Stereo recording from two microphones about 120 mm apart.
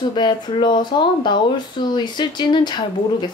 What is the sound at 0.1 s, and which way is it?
Speech, 40° left (ahead or behind).